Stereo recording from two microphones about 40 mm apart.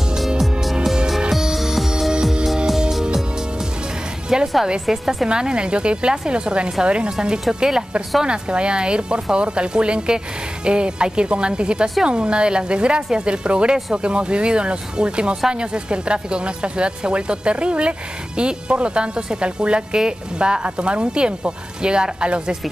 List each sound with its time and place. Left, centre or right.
0.4 s music: centre
4.3 s a woman's voice: centre
5.3 s speech: right